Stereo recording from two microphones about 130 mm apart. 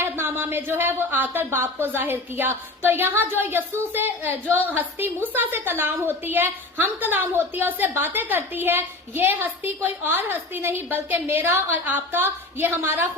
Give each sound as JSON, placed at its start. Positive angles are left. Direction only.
{"t": 0.0, "sound": "a woman's voice", "side_deg": -15}